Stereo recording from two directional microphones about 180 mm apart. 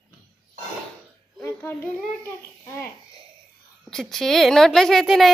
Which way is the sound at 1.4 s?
10° left (ahead or behind).